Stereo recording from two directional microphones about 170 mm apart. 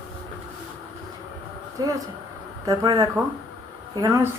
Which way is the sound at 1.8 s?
20° right (ahead or behind).